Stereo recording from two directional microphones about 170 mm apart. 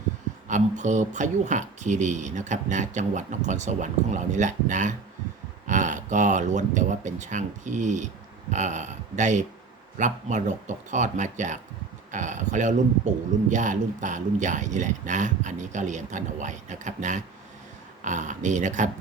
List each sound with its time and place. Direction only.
0.4 s speech: 45° right (ahead or behind)